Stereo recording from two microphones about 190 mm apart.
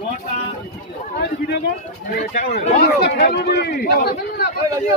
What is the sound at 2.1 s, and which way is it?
Speech, 45° left (ahead or behind).